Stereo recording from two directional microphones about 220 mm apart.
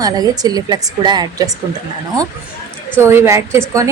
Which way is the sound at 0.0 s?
15° right (ahead or behind).